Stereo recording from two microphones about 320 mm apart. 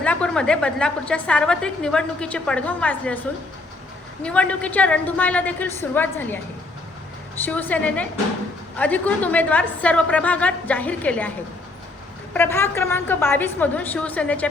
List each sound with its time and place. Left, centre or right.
0.0 s a woman's voice: centre
4.2 s a woman's voice: centre
7.4 s a woman's voice: centre
12.3 s a woman's voice: centre